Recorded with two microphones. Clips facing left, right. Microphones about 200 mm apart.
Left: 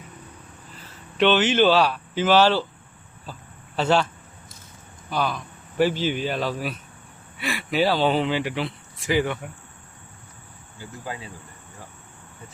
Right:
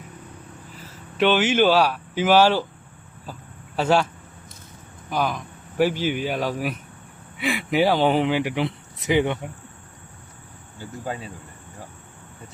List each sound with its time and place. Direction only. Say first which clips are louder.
1.2 s speech: even; 10° right (ahead or behind)
3.8 s speech: right 1 dB; 10° right (ahead or behind)